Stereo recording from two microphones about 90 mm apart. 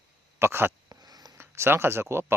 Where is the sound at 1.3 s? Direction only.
30° right (ahead or behind).